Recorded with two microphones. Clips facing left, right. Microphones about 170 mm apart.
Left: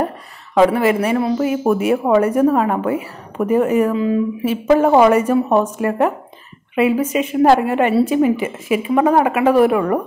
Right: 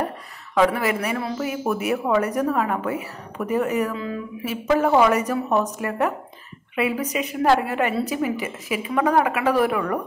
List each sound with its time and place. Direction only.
0.6 s a woman's voice: 25° left (ahead or behind)